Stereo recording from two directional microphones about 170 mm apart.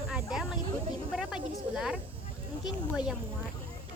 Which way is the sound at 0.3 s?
Centre (ahead or behind).